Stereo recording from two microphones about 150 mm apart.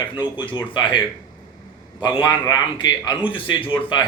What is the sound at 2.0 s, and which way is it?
A man's voice, 30° left (ahead or behind).